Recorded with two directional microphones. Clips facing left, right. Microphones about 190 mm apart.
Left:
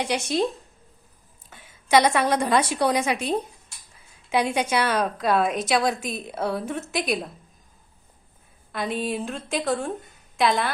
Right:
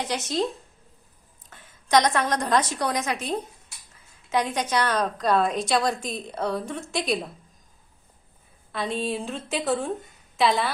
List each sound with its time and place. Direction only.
0.0 s a woman's voice: 10° left (ahead or behind)
1.5 s a woman's voice: 10° left (ahead or behind)
8.7 s a woman's voice: centre (ahead or behind)